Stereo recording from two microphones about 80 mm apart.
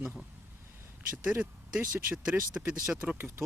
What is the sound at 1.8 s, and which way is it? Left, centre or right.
Speech, right.